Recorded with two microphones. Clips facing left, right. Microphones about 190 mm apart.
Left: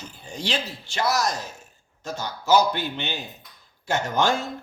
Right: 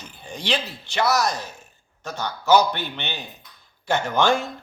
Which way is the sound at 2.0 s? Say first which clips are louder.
Right 3 dB; 65° right (ahead or behind).